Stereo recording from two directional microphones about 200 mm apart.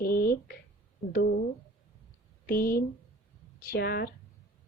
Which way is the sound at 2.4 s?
45° left (ahead or behind).